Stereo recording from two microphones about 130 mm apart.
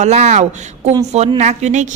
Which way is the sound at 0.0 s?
60° right (ahead or behind).